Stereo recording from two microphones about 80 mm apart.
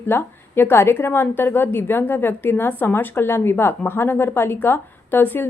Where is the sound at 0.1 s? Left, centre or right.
Left.